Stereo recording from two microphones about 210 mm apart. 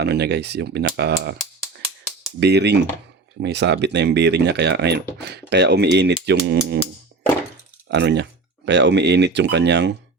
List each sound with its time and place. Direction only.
0.0 s speech: 50° right (ahead or behind)
2.4 s speech: 55° right (ahead or behind)
7.9 s speech: 55° right (ahead or behind)